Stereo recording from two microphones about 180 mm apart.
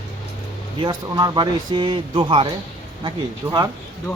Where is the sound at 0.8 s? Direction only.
20° right (ahead or behind).